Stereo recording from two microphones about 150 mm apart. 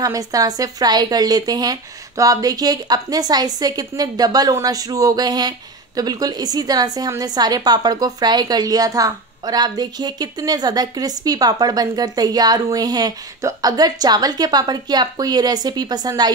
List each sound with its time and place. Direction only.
0.0 s a woman's voice: 25° right (ahead or behind)